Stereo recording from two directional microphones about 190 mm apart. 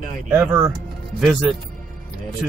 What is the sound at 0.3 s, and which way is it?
Speech, 15° right (ahead or behind).